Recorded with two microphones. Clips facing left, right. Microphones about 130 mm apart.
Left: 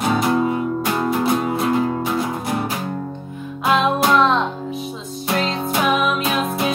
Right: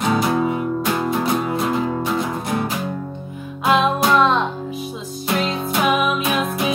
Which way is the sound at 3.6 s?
Centre (ahead or behind).